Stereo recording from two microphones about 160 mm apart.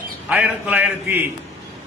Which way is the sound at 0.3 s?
5° right (ahead or behind).